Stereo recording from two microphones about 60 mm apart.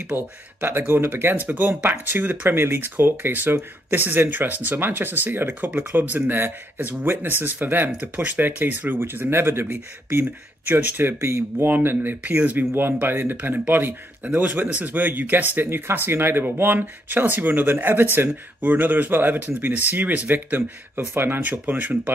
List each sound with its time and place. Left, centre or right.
0.1 s speech: right
12.7 s speech: right
21.4 s speech: right